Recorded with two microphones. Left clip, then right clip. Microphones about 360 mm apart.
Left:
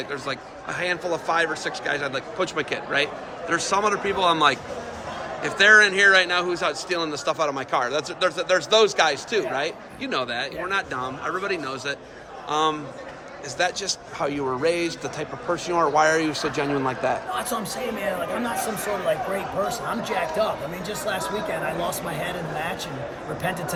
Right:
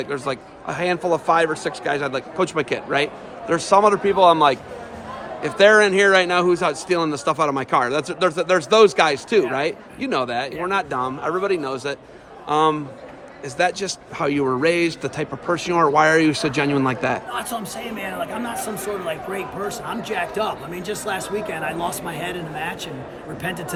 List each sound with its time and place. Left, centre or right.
0.1 s a man's voice: centre
17.3 s speech: centre
19.6 s speech: centre
22.2 s speech: centre